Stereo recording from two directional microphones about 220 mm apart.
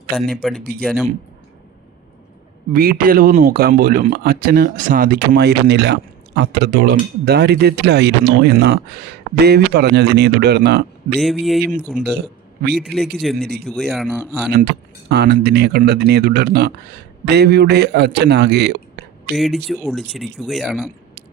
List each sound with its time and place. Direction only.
0.2 s speech: centre (ahead or behind)
0.6 s speech: 40° right (ahead or behind)
2.7 s speech: 40° right (ahead or behind)
11.2 s speech: centre (ahead or behind)
11.9 s speech: 35° right (ahead or behind)
13.2 s speech: centre (ahead or behind)
14.5 s speech: 45° right (ahead or behind)
19.3 s speech: centre (ahead or behind)